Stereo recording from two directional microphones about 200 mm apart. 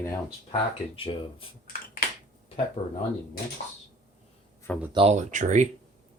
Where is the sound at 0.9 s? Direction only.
25° left (ahead or behind).